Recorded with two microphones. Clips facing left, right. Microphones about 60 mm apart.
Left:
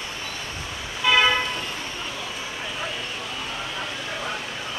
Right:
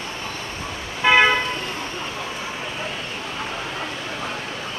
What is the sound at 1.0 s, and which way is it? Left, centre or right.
Vehicle, right.